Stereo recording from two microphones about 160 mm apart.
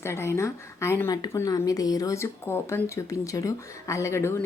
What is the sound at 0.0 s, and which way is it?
Speech, 15° left (ahead or behind).